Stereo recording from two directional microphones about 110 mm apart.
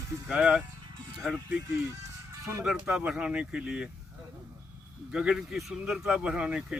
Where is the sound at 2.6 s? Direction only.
5° right (ahead or behind).